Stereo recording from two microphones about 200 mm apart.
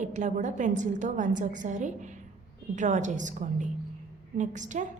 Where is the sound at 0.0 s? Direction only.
35° right (ahead or behind).